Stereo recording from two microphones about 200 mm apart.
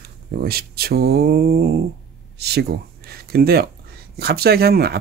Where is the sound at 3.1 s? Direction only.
50° right (ahead or behind).